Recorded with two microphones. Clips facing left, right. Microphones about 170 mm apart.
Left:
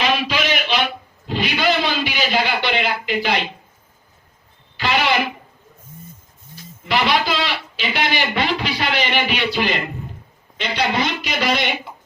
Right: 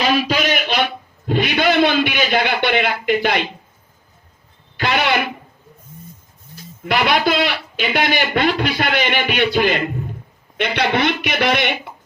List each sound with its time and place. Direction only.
0.0 s a sound: 45° right (ahead or behind)
1.3 s a man's voice: 55° right (ahead or behind)
6.8 s speech: 50° right (ahead or behind)
10.6 s speech: 60° right (ahead or behind)